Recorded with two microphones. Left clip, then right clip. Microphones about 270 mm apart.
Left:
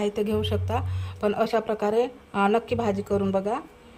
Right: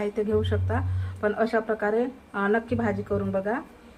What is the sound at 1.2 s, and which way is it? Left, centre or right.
A woman's voice, left.